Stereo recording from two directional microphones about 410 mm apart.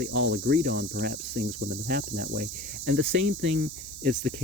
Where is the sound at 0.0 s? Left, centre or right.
Right.